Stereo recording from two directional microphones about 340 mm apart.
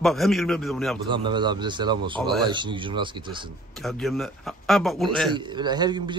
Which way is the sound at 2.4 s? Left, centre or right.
Centre.